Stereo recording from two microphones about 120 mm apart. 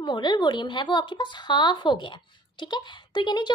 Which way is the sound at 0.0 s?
40° left (ahead or behind).